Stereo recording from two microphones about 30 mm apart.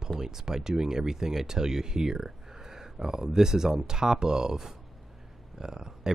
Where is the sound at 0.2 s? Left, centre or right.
Centre.